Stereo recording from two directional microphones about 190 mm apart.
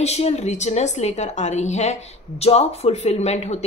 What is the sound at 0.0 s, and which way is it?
A woman's voice, 35° left (ahead or behind).